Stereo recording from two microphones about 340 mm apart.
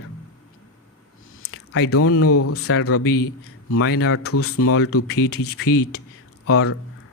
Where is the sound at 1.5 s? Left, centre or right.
Left.